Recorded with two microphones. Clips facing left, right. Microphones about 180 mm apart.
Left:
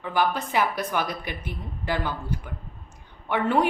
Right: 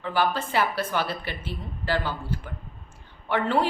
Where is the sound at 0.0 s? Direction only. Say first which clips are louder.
Even; 15° left (ahead or behind).